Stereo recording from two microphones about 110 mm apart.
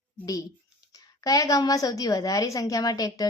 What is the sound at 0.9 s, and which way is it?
A woman's voice, 35° left (ahead or behind).